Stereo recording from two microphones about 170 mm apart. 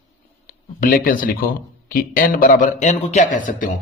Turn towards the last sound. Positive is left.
turn(degrees=50)  # may be behind; listen again after turning